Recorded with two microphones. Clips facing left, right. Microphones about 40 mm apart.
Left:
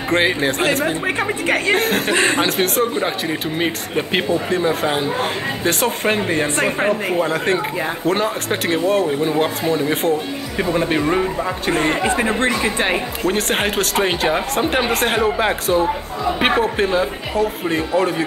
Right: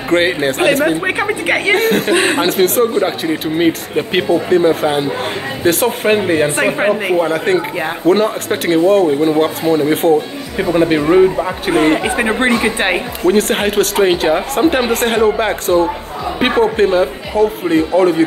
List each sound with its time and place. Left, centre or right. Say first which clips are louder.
0.1 s a man's voice: right 4 dB; centre
1.8 s a man's voice: right 4 dB; centre
8.1 s a man's voice: right 7 dB; centre
13.2 s speech: right 8 dB; centre